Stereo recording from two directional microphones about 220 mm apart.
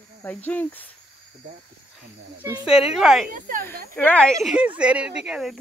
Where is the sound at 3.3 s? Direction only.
40° right (ahead or behind).